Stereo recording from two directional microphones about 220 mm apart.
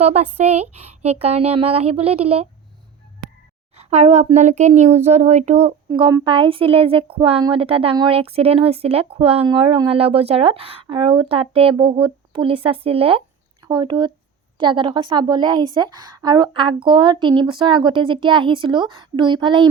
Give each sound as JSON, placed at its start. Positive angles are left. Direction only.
{"t": 0.0, "sound": "speech", "side_deg": -30}
{"t": 3.8, "sound": "speech", "side_deg": -30}
{"t": 5.9, "sound": "speech", "side_deg": -20}